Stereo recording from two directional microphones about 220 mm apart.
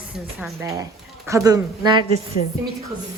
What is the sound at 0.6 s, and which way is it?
Speech, 15° right (ahead or behind).